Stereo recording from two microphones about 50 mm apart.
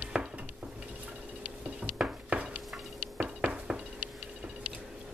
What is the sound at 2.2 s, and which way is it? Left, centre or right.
Stir, right.